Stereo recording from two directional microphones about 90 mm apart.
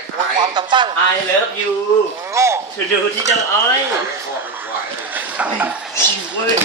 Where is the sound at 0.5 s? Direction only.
60° right (ahead or behind).